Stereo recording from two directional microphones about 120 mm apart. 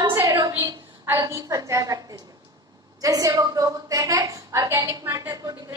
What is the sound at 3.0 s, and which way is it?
A woman's voice, 25° right (ahead or behind).